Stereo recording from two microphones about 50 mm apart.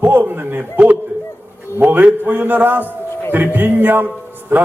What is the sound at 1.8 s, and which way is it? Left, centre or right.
A man's voice, right.